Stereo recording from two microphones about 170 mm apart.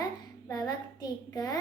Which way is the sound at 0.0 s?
20° left (ahead or behind).